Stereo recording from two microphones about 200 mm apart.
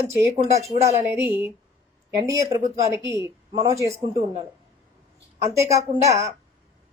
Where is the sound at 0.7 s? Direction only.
35° right (ahead or behind).